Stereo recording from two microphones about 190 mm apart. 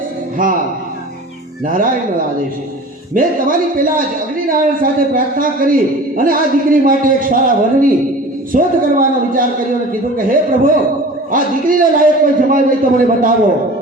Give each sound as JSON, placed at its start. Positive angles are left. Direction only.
{"t": 1.6, "sound": "a man's voice", "side_deg": -45}